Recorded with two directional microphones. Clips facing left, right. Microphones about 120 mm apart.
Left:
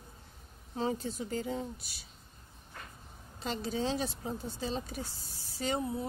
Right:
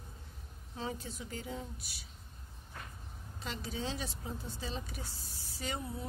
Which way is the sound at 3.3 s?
30° left (ahead or behind).